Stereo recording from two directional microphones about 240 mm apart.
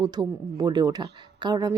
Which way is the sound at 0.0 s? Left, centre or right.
Centre.